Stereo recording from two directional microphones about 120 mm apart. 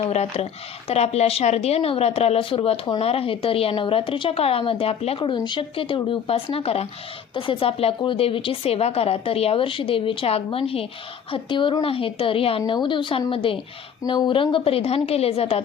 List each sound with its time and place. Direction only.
0.0 s speech: 60° left (ahead or behind)
5.2 s speech: 40° left (ahead or behind)